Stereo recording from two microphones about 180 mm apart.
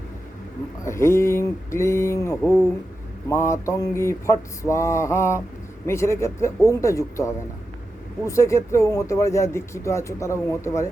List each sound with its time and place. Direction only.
0.9 s speech: 15° left (ahead or behind)